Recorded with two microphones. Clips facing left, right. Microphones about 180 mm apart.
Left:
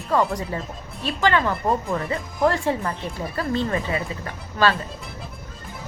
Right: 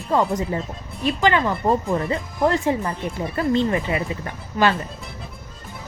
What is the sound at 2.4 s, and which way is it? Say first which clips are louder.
Speech: right 1 dB; 20° right (ahead or behind).